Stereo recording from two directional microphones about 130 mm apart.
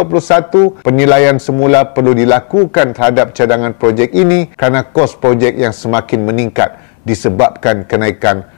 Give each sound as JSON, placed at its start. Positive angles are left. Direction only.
{"t": 0.0, "sound": "a man's voice", "side_deg": 20}